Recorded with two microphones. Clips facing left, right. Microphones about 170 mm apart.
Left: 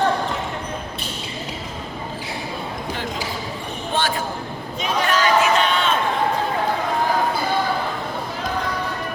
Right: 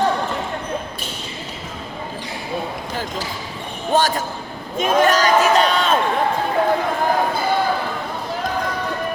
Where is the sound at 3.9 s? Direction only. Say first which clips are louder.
Right 5 dB; 40° right (ahead or behind).